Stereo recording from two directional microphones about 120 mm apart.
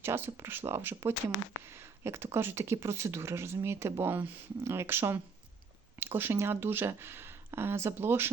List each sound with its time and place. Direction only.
0.0 s speech: 20° right (ahead or behind)